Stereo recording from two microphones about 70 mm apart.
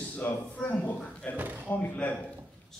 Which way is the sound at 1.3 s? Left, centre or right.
Right.